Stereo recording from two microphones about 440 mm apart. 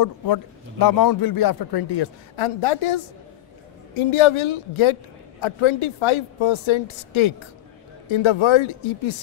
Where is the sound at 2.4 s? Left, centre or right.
Left.